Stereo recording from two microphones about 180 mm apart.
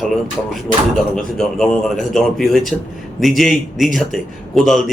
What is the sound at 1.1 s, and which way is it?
A man's voice, 5° left (ahead or behind).